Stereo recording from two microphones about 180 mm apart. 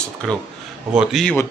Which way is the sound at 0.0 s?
5° left (ahead or behind).